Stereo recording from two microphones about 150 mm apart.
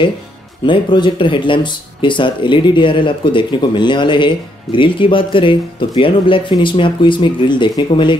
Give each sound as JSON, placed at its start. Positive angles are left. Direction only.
{"t": 0.7, "sound": "speech", "side_deg": 30}